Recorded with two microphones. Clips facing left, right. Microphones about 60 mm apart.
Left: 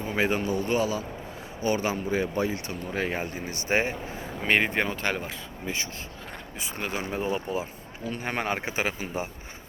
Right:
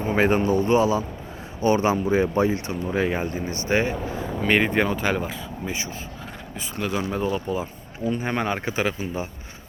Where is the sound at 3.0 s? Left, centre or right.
Centre.